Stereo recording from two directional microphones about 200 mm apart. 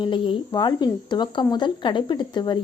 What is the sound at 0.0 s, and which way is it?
Speech, 25° left (ahead or behind).